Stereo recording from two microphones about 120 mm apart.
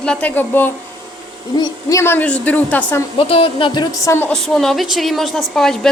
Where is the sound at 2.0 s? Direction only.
15° left (ahead or behind).